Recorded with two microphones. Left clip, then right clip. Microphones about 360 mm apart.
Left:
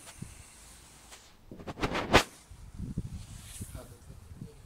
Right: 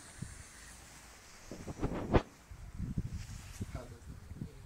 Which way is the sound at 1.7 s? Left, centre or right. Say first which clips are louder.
Left 8 dB; left.